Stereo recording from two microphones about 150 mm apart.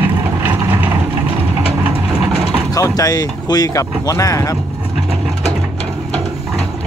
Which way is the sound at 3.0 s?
25° left (ahead or behind).